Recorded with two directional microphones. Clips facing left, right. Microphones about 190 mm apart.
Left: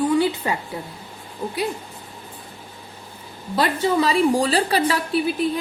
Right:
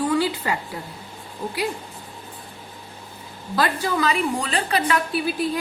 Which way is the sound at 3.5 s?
30° left (ahead or behind).